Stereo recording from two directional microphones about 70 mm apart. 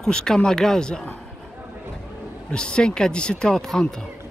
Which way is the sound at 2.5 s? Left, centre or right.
Centre.